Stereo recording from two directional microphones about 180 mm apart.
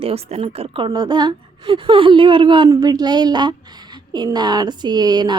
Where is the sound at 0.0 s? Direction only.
35° right (ahead or behind).